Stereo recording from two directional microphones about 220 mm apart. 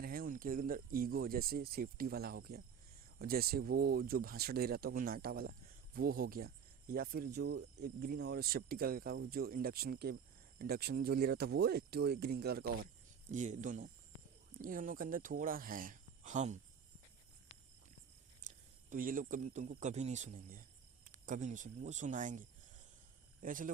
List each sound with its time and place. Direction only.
0.0 s speech: 40° right (ahead or behind)
18.4 s speech: 35° right (ahead or behind)